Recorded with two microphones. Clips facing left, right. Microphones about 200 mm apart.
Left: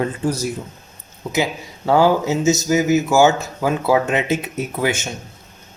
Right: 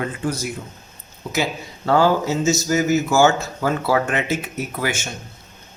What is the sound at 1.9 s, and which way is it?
Speech, 15° left (ahead or behind).